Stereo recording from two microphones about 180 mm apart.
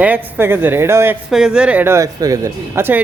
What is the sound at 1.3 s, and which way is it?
A man's voice, 5° right (ahead or behind).